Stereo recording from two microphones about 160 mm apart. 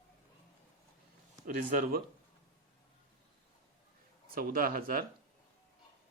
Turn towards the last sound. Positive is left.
turn(degrees=-65)  # may be behind; listen again after turning